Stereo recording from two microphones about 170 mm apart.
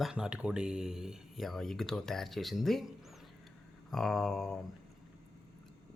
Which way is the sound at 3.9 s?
Centre (ahead or behind).